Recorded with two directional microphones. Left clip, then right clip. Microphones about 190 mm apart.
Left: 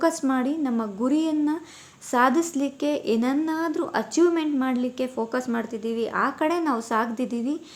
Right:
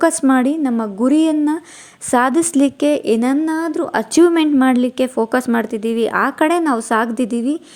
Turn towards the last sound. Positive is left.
turn(degrees=-35)  # may be behind; listen again after turning